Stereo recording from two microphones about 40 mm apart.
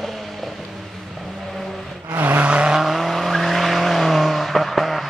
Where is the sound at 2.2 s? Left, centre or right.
Right.